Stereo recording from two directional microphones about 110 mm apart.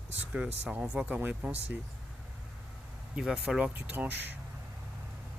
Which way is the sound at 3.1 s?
5° right (ahead or behind).